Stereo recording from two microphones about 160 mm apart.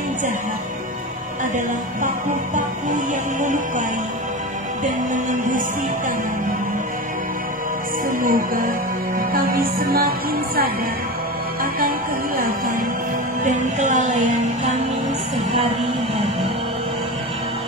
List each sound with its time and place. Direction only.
3.3 s music: 50° right (ahead or behind)
5.1 s music: 55° right (ahead or behind)
8.2 s music: 55° right (ahead or behind)
13.4 s music: 50° right (ahead or behind)